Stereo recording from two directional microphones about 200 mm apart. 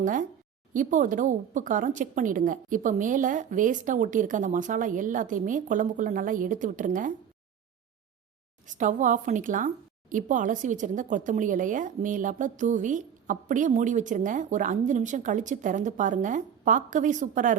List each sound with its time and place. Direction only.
0.0 s speech: 40° right (ahead or behind)
8.6 s speech: 40° right (ahead or behind)